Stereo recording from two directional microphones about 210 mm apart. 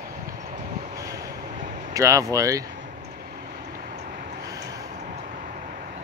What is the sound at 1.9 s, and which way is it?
Speech, 15° right (ahead or behind).